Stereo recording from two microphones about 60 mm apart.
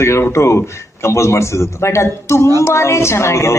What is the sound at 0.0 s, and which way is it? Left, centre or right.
A man's voice, left.